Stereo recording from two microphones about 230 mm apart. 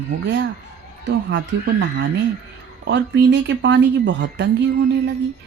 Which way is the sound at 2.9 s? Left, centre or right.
Right.